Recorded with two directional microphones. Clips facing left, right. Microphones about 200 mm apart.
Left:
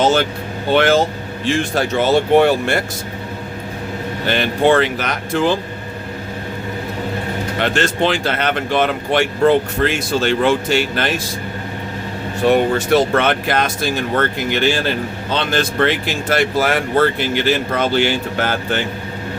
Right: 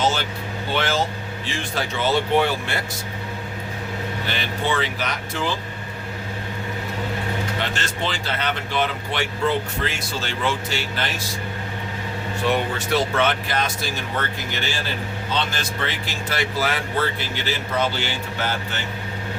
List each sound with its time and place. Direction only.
0.0 s vehicle: 55° left (ahead or behind)
0.7 s speech: 55° left (ahead or behind)
4.3 s speech: 55° left (ahead or behind)
7.6 s speech: 60° left (ahead or behind)
12.4 s speech: 45° left (ahead or behind)